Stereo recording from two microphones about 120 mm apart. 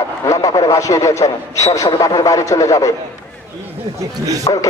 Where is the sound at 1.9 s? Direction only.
40° left (ahead or behind).